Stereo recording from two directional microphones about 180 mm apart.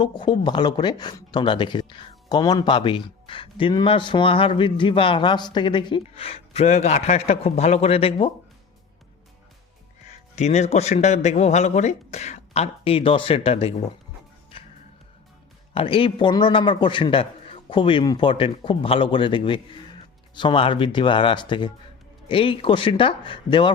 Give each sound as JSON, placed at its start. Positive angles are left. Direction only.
{"t": 0.2, "sound": "speech", "side_deg": 25}
{"t": 10.1, "sound": "a man's voice", "side_deg": 40}
{"t": 14.5, "sound": "music", "side_deg": 30}
{"t": 15.7, "sound": "speech", "side_deg": 30}